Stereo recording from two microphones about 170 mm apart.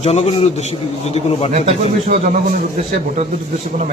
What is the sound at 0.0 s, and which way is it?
A man's voice, 40° left (ahead or behind).